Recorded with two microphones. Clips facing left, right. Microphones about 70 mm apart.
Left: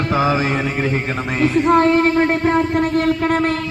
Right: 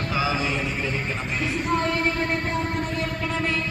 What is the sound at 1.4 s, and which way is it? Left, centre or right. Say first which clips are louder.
A man's voice: left 12 dB; left.